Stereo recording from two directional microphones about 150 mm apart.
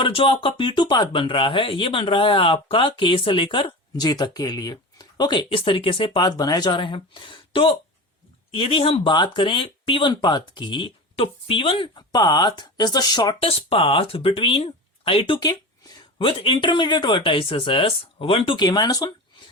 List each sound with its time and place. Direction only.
0.0 s speech: 35° left (ahead or behind)
13.5 s speech: 40° left (ahead or behind)